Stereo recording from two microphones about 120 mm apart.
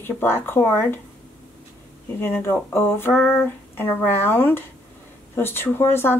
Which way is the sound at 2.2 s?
20° left (ahead or behind).